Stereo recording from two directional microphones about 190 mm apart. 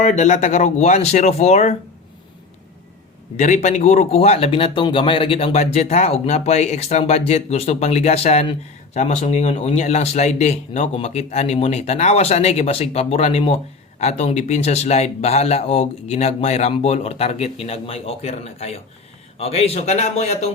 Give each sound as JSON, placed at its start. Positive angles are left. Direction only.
{"t": 0.0, "sound": "speech", "side_deg": 40}
{"t": 3.3, "sound": "speech", "side_deg": 40}